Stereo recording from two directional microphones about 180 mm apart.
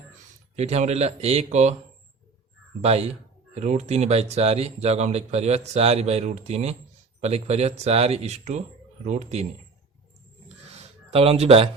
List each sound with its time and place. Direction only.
0.5 s speech: 35° right (ahead or behind)
2.8 s speech: 35° right (ahead or behind)
11.1 s speech: 35° right (ahead or behind)